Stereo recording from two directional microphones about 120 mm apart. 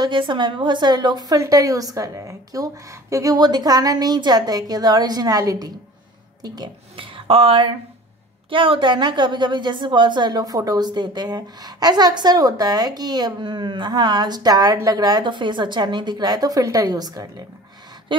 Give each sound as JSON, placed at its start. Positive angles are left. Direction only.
{"t": 0.0, "sound": "a woman's voice", "side_deg": -40}